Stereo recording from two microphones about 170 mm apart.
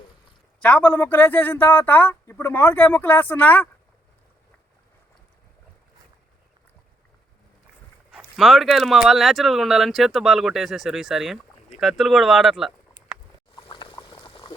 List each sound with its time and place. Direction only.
0.6 s speech: 10° left (ahead or behind)
8.4 s speech: centre (ahead or behind)
13.6 s pour: 30° left (ahead or behind)